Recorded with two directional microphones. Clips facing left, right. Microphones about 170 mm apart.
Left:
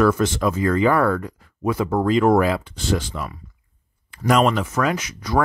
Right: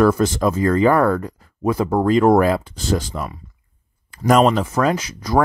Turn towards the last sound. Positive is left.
turn(degrees=-35)  # may be behind; listen again after turning